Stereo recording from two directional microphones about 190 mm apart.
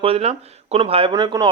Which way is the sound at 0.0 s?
30° right (ahead or behind).